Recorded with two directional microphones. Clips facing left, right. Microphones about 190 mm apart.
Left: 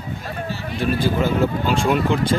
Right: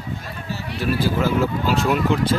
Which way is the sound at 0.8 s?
5° right (ahead or behind).